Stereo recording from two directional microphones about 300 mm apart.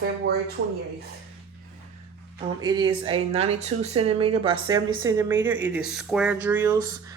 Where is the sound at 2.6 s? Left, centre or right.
Centre.